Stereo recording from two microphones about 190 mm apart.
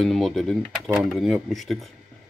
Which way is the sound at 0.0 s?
Centre (ahead or behind).